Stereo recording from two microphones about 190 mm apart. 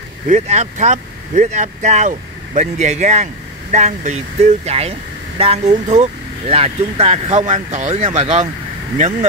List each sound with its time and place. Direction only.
0.3 s speech: 40° right (ahead or behind)